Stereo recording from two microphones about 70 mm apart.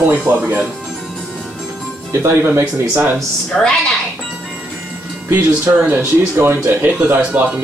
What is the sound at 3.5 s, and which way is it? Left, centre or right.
Music, centre.